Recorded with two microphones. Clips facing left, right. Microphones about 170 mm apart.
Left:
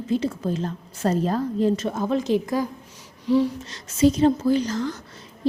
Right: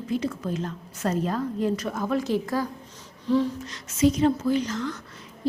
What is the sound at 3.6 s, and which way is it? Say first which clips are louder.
Speech: left 3 dB; 30° left (ahead or behind).